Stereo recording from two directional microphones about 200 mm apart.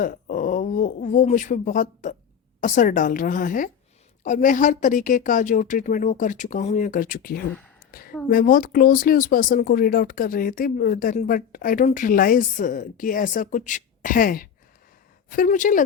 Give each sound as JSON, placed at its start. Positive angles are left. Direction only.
{"t": 0.0, "sound": "a woman's voice", "side_deg": 40}